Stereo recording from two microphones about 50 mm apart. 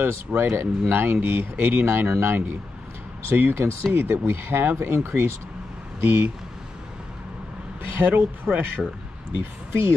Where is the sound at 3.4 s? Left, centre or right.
Right.